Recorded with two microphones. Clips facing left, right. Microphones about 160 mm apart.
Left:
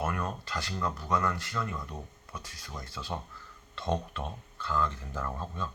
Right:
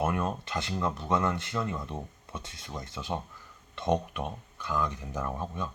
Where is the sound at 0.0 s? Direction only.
20° right (ahead or behind).